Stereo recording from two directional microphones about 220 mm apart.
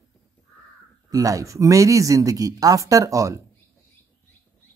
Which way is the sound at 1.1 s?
15° right (ahead or behind).